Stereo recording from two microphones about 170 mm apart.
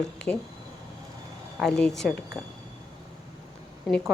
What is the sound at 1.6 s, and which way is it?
Speech, 5° left (ahead or behind).